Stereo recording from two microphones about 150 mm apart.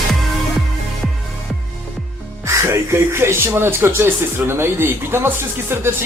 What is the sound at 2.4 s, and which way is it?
Speech, 20° right (ahead or behind).